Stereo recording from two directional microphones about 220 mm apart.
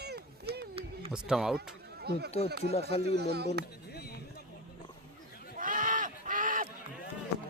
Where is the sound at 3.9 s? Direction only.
45° left (ahead or behind).